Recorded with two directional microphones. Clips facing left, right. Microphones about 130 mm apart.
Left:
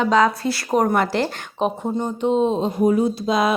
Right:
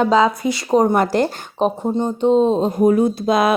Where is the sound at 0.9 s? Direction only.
40° right (ahead or behind).